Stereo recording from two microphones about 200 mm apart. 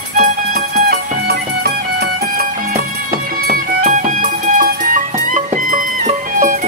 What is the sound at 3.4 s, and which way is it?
Music, 40° right (ahead or behind).